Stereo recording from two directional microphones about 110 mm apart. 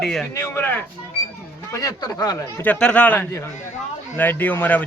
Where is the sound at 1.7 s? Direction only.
30° left (ahead or behind).